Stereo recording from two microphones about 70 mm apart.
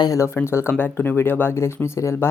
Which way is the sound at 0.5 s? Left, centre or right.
Left.